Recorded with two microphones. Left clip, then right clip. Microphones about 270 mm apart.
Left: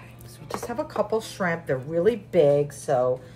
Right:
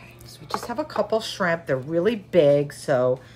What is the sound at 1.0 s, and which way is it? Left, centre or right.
Speech, centre.